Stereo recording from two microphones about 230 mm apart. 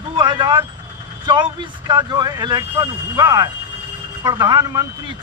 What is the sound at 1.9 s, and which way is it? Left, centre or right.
Speech, centre.